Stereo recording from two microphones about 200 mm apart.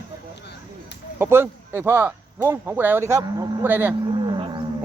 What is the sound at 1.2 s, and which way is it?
Speech, 10° right (ahead or behind).